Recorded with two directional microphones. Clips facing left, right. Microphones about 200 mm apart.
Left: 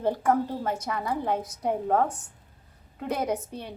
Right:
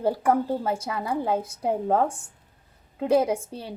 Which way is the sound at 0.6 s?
30° right (ahead or behind).